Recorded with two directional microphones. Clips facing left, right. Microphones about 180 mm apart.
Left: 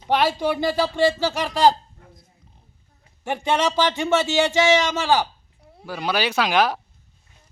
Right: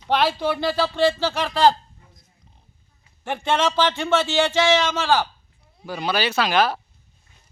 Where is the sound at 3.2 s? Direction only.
10° left (ahead or behind).